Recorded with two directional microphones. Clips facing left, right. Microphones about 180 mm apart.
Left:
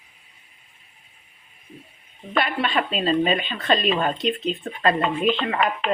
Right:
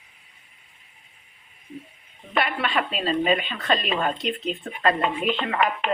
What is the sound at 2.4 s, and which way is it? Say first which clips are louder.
Speech: left 1 dB; 25° left (ahead or behind).